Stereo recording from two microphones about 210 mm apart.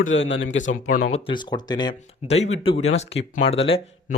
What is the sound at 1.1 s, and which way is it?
Speech, 25° left (ahead or behind).